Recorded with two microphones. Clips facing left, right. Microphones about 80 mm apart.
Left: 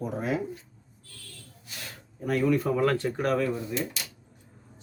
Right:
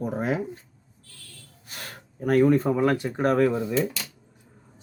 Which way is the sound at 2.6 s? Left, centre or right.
Centre.